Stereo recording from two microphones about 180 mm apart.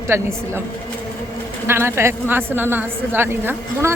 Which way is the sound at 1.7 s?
15° right (ahead or behind).